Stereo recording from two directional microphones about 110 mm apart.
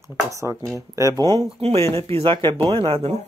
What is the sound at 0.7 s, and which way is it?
Speech, 30° right (ahead or behind).